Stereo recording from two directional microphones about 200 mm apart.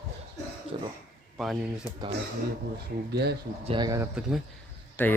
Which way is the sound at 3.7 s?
20° right (ahead or behind).